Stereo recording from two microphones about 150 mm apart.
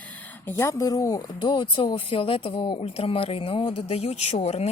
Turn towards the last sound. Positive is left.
turn(degrees=45)  # may be behind; listen again after turning